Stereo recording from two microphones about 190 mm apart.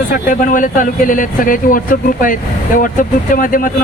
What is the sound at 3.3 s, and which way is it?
Speech, 45° left (ahead or behind).